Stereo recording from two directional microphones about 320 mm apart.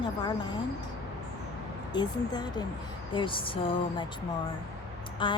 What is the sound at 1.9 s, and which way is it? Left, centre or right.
A woman's voice, centre.